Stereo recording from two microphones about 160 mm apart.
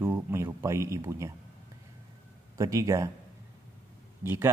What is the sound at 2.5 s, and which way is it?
Speech, 20° right (ahead or behind).